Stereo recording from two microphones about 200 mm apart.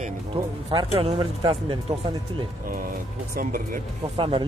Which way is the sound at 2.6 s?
45° right (ahead or behind).